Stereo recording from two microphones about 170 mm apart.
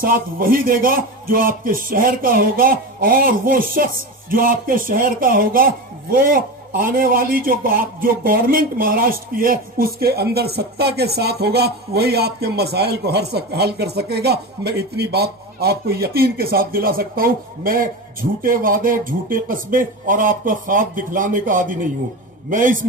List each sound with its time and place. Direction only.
0.0 s a man's voice: 55° right (ahead or behind)